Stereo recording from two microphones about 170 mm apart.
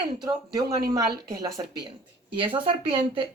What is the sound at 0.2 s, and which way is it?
Speech, 20° right (ahead or behind).